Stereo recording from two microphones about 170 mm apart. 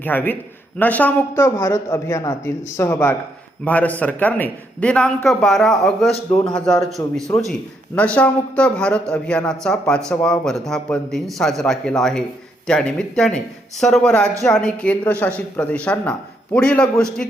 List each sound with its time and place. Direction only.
0.0 s a man's voice: 10° left (ahead or behind)